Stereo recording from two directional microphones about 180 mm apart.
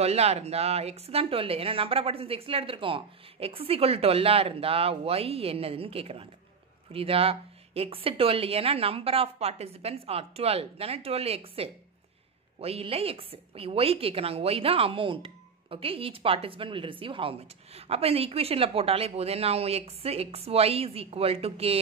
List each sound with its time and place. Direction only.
0.0 s a woman's voice: 35° right (ahead or behind)